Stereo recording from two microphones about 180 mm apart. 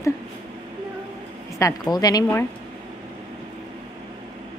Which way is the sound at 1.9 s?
20° left (ahead or behind).